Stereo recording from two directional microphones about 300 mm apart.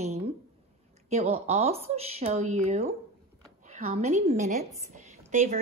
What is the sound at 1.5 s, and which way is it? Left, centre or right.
A woman's voice, right.